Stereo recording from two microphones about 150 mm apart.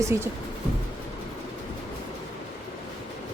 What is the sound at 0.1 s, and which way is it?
Speech, 15° right (ahead or behind).